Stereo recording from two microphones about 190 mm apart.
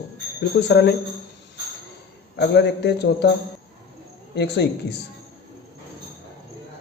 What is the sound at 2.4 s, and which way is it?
Speech, 60° left (ahead or behind).